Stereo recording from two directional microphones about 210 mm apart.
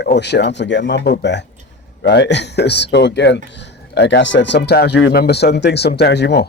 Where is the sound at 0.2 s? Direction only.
55° left (ahead or behind).